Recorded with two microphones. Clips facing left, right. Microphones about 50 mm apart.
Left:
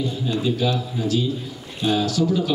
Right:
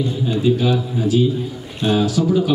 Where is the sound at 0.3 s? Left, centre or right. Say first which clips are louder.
Right 5 dB; centre.